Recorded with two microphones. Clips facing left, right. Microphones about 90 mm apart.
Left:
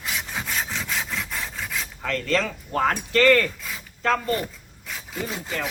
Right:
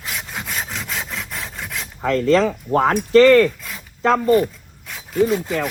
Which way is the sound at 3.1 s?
20° right (ahead or behind).